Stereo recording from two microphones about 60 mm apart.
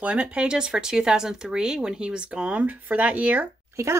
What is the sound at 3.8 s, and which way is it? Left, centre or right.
Speech, right.